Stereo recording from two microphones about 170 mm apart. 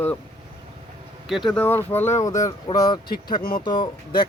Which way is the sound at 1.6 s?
10° left (ahead or behind).